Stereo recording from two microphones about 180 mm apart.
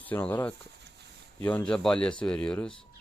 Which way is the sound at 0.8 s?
70° right (ahead or behind).